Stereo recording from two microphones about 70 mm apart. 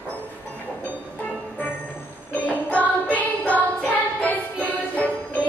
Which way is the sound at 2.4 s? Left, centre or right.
Left.